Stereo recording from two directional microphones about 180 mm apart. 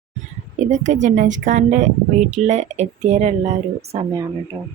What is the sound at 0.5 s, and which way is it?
Speech, 40° right (ahead or behind).